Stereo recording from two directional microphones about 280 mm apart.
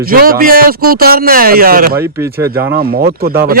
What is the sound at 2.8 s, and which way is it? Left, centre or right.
Speech, right.